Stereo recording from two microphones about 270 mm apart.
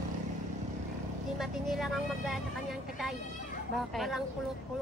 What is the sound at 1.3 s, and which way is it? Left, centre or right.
Speech, centre.